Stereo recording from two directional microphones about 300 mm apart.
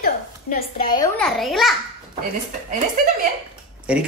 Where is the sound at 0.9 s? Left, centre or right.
Centre.